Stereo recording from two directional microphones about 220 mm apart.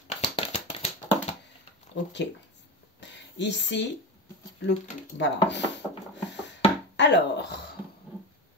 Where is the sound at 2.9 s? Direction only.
55° left (ahead or behind).